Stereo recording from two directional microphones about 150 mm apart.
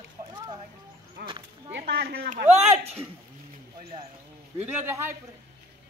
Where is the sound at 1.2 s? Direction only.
90° right.